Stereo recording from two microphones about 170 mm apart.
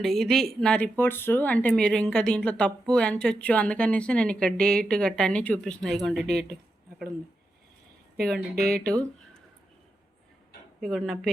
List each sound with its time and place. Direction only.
0.0 s speech: centre (ahead or behind)
8.1 s speech: 65° right (ahead or behind)
8.8 s speech: 5° left (ahead or behind)
10.8 s speech: centre (ahead or behind)